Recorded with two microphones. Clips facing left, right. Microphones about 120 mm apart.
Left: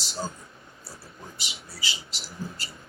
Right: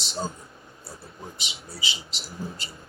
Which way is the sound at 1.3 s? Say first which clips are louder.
Right 2 dB; 20° right (ahead or behind).